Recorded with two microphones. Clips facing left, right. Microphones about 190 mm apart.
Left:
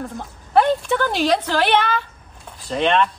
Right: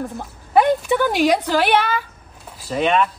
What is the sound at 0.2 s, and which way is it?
A woman's voice, 10° right (ahead or behind).